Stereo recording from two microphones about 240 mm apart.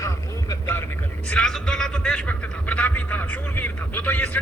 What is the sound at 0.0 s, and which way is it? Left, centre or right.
A man's voice, centre.